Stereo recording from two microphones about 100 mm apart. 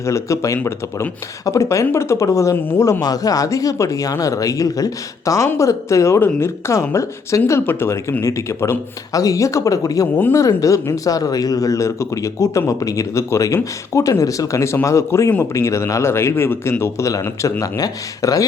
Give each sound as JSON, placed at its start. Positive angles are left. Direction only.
{"t": 0.0, "sound": "a man's voice", "side_deg": 30}
{"t": 2.8, "sound": "a man's voice", "side_deg": 35}